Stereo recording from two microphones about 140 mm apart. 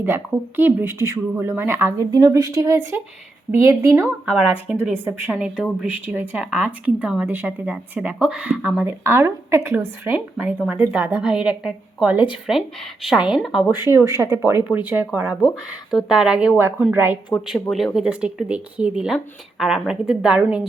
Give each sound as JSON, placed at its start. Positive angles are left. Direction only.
{"t": 0.0, "sound": "speech", "side_deg": -15}
{"t": 4.3, "sound": "speech", "side_deg": -5}
{"t": 13.7, "sound": "speech", "side_deg": -20}
{"t": 15.9, "sound": "speech", "side_deg": 0}
{"t": 17.4, "sound": "speech", "side_deg": 0}